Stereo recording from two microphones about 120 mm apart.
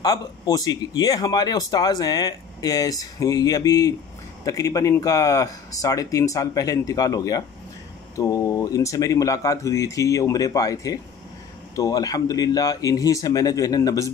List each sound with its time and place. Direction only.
0.0 s speech: 35° left (ahead or behind)